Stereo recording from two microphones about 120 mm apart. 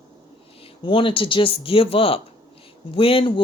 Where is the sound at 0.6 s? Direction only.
45° left (ahead or behind).